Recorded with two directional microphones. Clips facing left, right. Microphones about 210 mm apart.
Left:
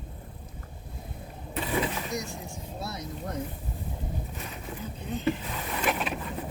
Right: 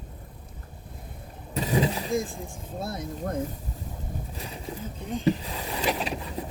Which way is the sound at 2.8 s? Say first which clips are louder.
Right 5 dB; 50° right (ahead or behind).